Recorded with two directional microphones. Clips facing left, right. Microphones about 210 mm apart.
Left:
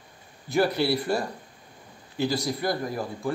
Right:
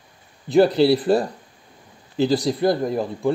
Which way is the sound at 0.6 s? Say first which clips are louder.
Right 8 dB; 30° right (ahead or behind).